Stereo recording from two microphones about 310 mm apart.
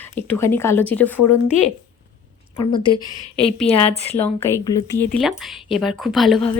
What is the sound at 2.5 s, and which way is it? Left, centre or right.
A woman's voice, centre.